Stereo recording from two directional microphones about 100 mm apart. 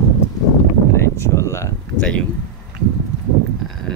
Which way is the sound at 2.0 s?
10° left (ahead or behind).